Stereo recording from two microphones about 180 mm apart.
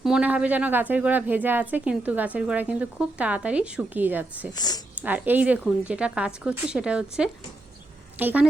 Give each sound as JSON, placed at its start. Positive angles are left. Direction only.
{"t": 0.0, "sound": "speech", "side_deg": -5}
{"t": 4.5, "sound": "speech", "side_deg": 20}
{"t": 5.0, "sound": "speech", "side_deg": -10}